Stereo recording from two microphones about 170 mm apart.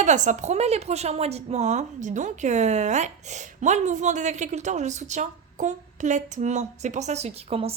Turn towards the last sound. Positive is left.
turn(degrees=-35)  # may be behind; listen again after turning